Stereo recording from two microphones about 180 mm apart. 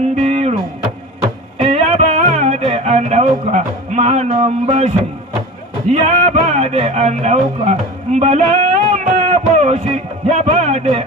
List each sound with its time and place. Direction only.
0.1 s music: 40° right (ahead or behind)
1.6 s music: 35° right (ahead or behind)
5.9 s a man's voice: 40° right (ahead or behind)
8.9 s music: 40° right (ahead or behind)
10.2 s a man's voice: 40° right (ahead or behind)